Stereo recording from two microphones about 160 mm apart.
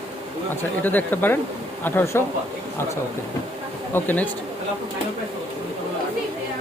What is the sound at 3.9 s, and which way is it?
Speech, 10° left (ahead or behind).